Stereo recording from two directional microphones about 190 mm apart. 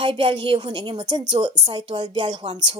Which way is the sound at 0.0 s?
25° right (ahead or behind).